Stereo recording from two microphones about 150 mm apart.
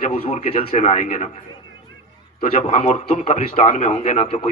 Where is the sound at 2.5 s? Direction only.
45° left (ahead or behind).